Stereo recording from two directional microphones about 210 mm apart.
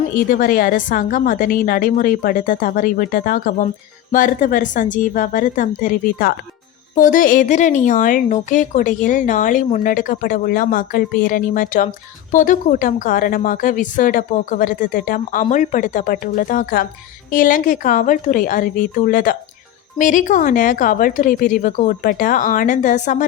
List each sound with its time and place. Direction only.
0.1 s a woman's voice: 40° left (ahead or behind)